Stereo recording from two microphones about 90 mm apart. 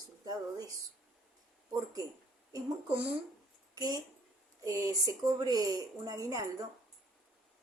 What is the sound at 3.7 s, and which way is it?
A woman's voice, 45° right (ahead or behind).